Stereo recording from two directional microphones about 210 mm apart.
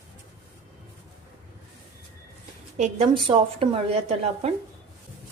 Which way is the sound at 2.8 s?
25° right (ahead or behind).